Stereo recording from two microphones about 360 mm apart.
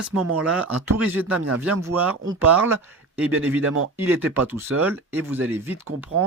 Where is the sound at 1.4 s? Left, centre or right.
Right.